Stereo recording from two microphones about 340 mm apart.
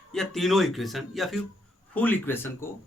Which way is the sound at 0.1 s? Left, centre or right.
Centre.